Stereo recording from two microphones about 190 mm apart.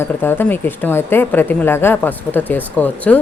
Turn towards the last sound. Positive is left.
turn(degrees=10)  # may be behind; listen again after turning